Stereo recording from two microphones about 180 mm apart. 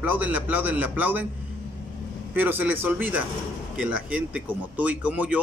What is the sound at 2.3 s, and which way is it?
A man's voice, 10° right (ahead or behind).